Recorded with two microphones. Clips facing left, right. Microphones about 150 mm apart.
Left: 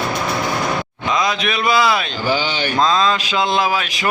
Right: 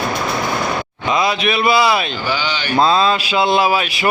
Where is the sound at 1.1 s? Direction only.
5° right (ahead or behind).